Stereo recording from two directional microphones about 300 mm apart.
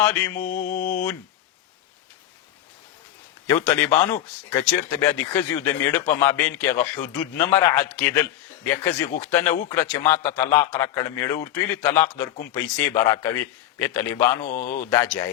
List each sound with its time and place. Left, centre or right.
0.0 s a man's voice: centre
0.6 s speech: left
3.4 s a man's voice: centre
14.4 s speech: left
14.8 s a man's voice: centre